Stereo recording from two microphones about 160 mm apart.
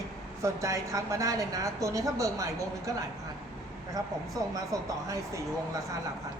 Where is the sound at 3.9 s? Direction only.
20° right (ahead or behind).